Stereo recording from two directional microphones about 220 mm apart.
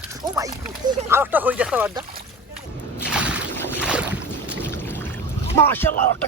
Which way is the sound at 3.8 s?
5° right (ahead or behind).